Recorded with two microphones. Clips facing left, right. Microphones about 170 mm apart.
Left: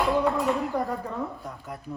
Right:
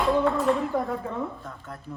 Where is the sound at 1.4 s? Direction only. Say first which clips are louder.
Left 2 dB; 15° left (ahead or behind).